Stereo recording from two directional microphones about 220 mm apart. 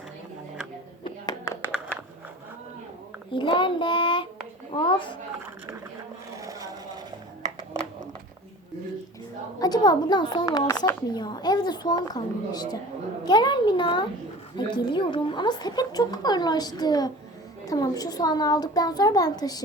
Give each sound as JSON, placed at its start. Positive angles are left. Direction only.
{"t": 1.0, "sound": "a sound", "side_deg": 15}
{"t": 3.3, "sound": "speech", "side_deg": 20}
{"t": 6.3, "sound": "vehicle", "side_deg": -15}
{"t": 9.6, "sound": "a woman's voice", "side_deg": 20}